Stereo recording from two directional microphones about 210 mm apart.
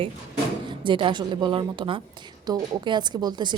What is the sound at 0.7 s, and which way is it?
A woman's voice, 25° right (ahead or behind).